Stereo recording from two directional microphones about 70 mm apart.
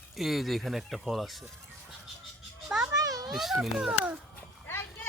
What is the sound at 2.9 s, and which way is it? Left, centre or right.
Children playing, right.